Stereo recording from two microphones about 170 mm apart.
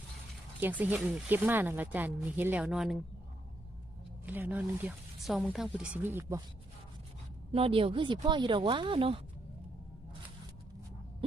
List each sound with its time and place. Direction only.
0.6 s speech: 10° right (ahead or behind)
4.3 s speech: 10° right (ahead or behind)
7.5 s speech: 35° right (ahead or behind)